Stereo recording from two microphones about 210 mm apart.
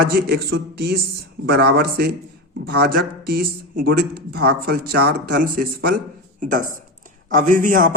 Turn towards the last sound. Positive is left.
turn(degrees=-40)  # may be behind; listen again after turning